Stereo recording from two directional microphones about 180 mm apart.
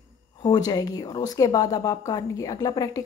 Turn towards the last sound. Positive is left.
turn(degrees=20)  # may be behind; listen again after turning